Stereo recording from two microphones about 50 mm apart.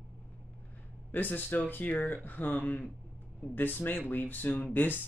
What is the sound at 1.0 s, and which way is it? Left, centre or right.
Speech, left.